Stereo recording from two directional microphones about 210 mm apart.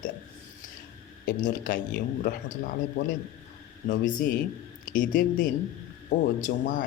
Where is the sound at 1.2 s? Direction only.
40° left (ahead or behind).